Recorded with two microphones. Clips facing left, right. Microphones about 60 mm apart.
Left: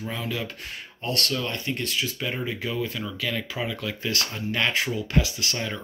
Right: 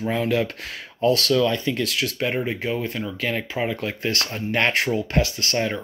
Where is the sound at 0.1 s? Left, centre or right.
Right.